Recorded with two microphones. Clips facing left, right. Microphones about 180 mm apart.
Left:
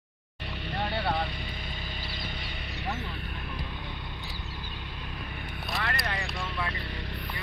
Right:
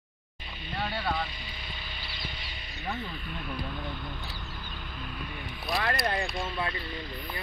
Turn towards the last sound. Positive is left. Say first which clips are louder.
# right 4 dB
turn(degrees=-35)  # may be behind; listen again after turning